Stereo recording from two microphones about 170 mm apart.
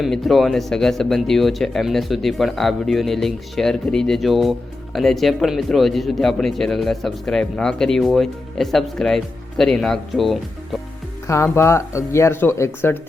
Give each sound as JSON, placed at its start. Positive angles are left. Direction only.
{"t": 0.0, "sound": "a man's voice", "side_deg": 0}
{"t": 11.3, "sound": "speech", "side_deg": 15}